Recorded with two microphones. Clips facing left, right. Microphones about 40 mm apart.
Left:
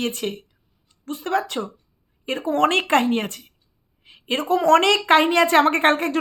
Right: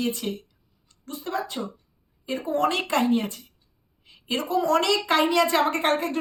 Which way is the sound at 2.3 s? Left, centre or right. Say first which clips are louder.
Left 4 dB; left.